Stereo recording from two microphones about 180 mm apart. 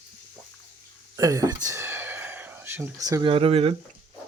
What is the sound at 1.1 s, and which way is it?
Speech, 20° right (ahead or behind).